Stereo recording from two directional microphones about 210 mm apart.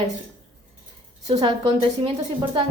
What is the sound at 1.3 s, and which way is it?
Speech, 30° right (ahead or behind).